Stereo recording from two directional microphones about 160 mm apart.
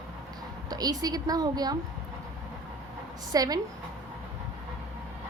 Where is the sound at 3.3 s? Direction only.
25° right (ahead or behind).